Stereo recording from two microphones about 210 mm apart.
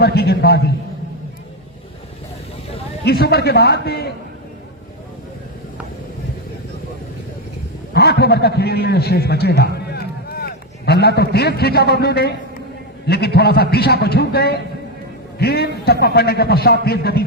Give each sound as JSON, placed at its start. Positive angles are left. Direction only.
{"t": 0.0, "sound": "a man's voice", "side_deg": 50}
{"t": 3.0, "sound": "a man's voice", "side_deg": 50}
{"t": 7.9, "sound": "a man's voice", "side_deg": 50}
{"t": 9.9, "sound": "a sound", "side_deg": 45}
{"t": 13.1, "sound": "a man's voice", "side_deg": 50}